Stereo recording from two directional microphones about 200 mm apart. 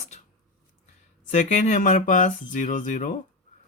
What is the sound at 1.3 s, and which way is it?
Speech, 35° left (ahead or behind).